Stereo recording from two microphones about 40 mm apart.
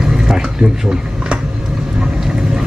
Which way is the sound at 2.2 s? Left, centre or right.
Centre.